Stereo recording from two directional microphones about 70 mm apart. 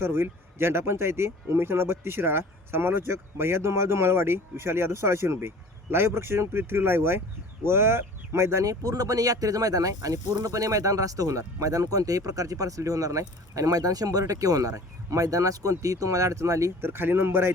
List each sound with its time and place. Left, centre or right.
0.0 s speech: right
8.6 s speech: right
16.8 s speech: right